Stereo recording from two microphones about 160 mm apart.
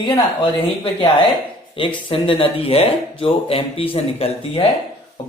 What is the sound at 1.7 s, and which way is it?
Speech, 30° left (ahead or behind).